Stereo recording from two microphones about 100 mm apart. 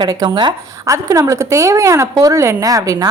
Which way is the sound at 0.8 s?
35° right (ahead or behind).